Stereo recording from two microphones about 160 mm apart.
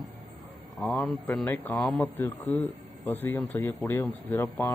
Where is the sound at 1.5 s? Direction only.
10° left (ahead or behind).